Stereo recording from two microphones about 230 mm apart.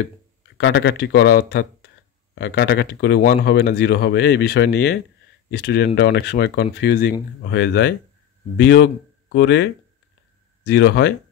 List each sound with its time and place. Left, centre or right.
0.6 s speech: left